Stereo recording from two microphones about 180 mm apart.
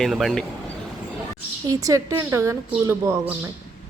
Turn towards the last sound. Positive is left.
turn(degrees=-15)  # may be behind; listen again after turning